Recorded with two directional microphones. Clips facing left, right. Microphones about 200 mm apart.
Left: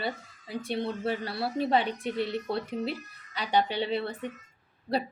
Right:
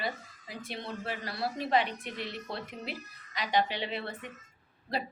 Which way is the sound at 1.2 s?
30° left (ahead or behind).